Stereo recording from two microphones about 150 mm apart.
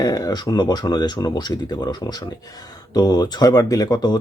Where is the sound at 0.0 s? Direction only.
25° left (ahead or behind).